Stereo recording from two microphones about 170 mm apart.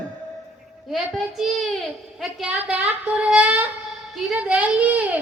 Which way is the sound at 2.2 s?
5° right (ahead or behind).